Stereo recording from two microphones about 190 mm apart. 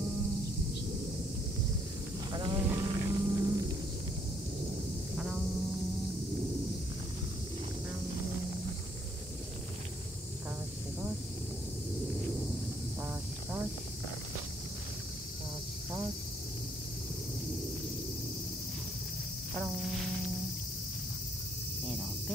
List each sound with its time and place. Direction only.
2.3 s sheep: 20° right (ahead or behind)
5.1 s a sound: 5° right (ahead or behind)
13.0 s cricket: 10° right (ahead or behind)
19.5 s music: centre (ahead or behind)